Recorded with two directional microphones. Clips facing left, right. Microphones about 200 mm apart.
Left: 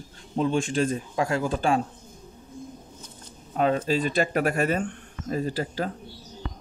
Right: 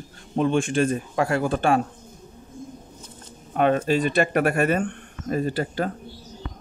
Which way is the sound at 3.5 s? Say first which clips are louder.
Right 3 dB; 65° right (ahead or behind).